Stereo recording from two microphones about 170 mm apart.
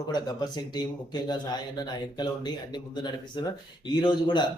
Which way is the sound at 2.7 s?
25° left (ahead or behind).